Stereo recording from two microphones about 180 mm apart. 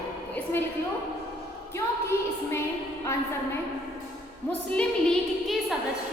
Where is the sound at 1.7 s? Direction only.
15° left (ahead or behind).